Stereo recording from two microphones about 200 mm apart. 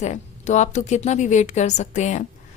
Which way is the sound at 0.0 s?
35° left (ahead or behind).